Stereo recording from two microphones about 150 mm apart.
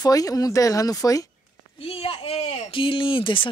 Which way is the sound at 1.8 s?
40° left (ahead or behind).